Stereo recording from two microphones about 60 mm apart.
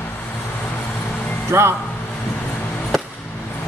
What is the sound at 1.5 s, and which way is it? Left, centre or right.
Speech, right.